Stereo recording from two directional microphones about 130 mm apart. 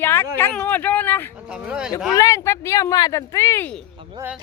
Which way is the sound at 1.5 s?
5° right (ahead or behind).